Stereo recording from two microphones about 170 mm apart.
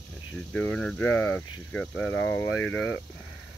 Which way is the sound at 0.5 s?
10° left (ahead or behind).